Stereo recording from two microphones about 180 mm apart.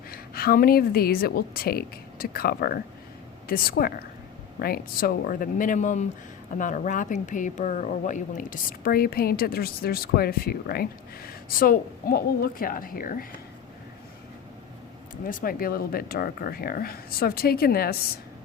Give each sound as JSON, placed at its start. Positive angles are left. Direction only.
{"t": 0.1, "sound": "a woman's voice", "side_deg": 55}
{"t": 15.2, "sound": "speech", "side_deg": 50}